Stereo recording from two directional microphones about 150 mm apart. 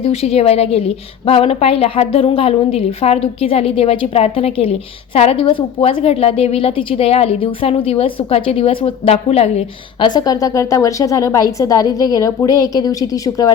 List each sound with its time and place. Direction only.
0.0 s a woman's voice: 40° left (ahead or behind)
10.0 s a woman's voice: 30° left (ahead or behind)